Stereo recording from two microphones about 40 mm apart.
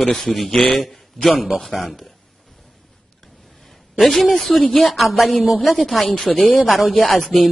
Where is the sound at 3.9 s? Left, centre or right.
Centre.